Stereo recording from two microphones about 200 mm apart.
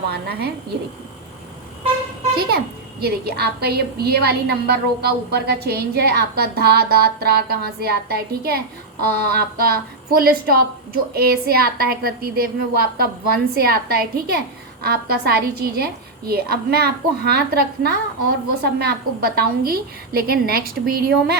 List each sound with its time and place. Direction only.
0.1 s a woman's voice: 50° right (ahead or behind)
2.5 s a woman's voice: 55° right (ahead or behind)